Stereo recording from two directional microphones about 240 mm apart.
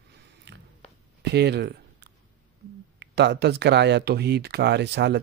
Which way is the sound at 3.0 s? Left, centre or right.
Right.